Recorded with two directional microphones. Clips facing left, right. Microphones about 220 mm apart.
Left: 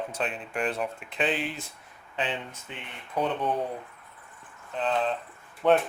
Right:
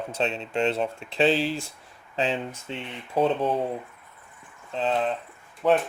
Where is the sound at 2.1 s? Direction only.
40° right (ahead or behind).